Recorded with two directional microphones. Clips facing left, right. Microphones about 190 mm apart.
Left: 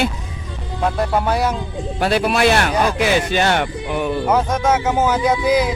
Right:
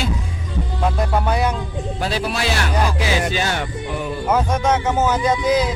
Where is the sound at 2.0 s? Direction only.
65° left (ahead or behind).